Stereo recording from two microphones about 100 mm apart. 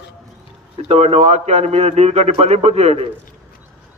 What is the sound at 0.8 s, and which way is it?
A man's voice, 90° right.